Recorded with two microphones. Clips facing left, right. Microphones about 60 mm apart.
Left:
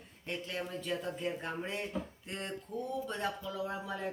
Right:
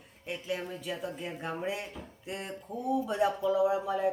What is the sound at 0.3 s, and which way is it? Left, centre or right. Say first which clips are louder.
Speech: right 3 dB; centre.